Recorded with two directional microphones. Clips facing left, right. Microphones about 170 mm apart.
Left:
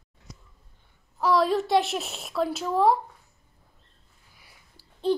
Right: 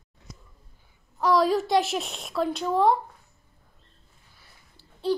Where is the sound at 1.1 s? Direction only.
Centre (ahead or behind).